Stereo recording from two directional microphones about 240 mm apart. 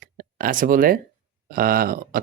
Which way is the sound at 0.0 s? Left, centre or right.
Right.